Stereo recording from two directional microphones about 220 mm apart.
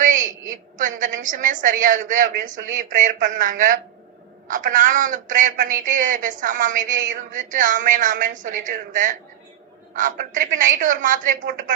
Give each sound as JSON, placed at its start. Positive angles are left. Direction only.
{"t": 0.0, "sound": "a man's voice", "side_deg": -35}